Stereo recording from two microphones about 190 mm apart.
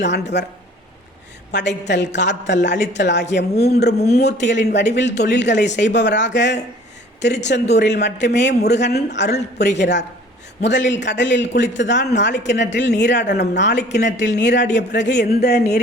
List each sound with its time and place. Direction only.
0.0 s speech: 65° left (ahead or behind)
1.5 s a woman's voice: 65° left (ahead or behind)